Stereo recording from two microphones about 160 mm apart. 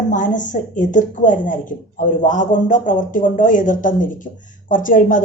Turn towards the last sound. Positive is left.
turn(degrees=55)  # may be behind; listen again after turning